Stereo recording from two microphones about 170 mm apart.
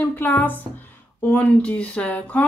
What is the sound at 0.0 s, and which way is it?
Speech, 10° left (ahead or behind).